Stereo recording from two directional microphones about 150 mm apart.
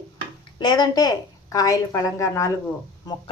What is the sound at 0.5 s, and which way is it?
A woman's voice, 30° left (ahead or behind).